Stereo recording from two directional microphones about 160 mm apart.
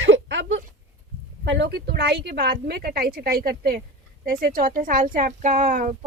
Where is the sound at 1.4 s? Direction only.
90° right.